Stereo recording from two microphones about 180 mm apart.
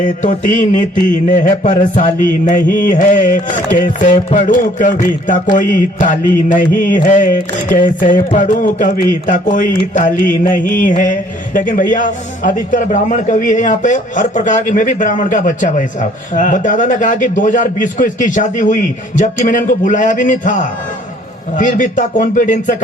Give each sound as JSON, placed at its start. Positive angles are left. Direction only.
{"t": 0.0, "sound": "a man's voice", "side_deg": 45}